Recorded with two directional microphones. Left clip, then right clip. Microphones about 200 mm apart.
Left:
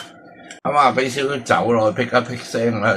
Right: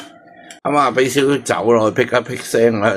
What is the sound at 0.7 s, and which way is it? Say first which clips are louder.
Speech: right 1 dB; 50° right (ahead or behind).